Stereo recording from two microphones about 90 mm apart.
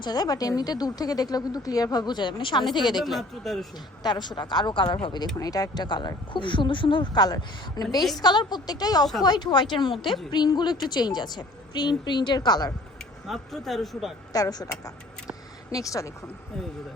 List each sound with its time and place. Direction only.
0.0 s speech: 50° left (ahead or behind)
3.0 s speech: centre (ahead or behind)
4.0 s speech: 55° left (ahead or behind)
5.4 s speech: 45° left (ahead or behind); by 10.0 s 65° left (ahead or behind)
10.0 s speech: centre (ahead or behind)
10.3 s speech: 55° left (ahead or behind)
13.2 s speech: centre (ahead or behind)
14.3 s speech: 45° left (ahead or behind)